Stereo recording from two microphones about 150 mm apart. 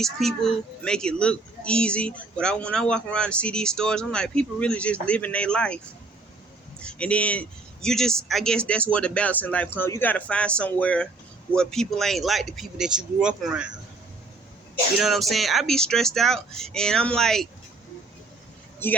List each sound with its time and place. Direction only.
0.0 s a woman's voice: centre (ahead or behind)
6.8 s a woman's voice: 10° left (ahead or behind)
14.9 s speech: centre (ahead or behind)